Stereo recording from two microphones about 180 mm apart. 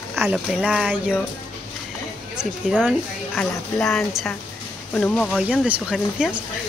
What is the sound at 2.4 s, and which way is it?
A woman's voice, centre (ahead or behind).